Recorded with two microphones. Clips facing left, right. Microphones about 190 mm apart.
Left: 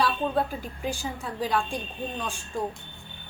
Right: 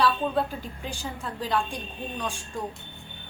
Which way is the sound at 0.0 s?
5° left (ahead or behind).